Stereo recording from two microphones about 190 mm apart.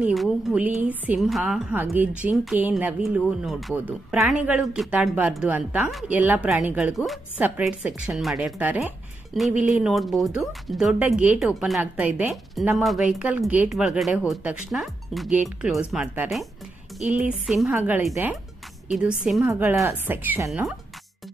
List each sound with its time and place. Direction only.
0.0 s a woman's voice: centre (ahead or behind)